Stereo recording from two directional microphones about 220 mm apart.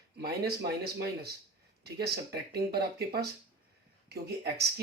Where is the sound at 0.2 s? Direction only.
45° right (ahead or behind).